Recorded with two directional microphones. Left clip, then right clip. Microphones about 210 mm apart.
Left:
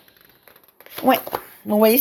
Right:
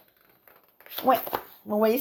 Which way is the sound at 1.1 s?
45° left (ahead or behind).